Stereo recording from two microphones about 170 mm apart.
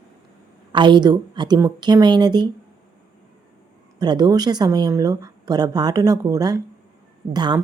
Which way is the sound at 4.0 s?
25° right (ahead or behind).